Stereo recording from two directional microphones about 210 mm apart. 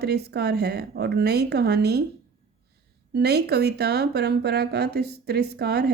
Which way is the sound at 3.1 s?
50° right (ahead or behind).